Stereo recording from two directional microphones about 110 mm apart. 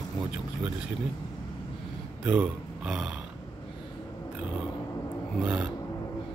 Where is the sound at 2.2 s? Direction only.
10° right (ahead or behind).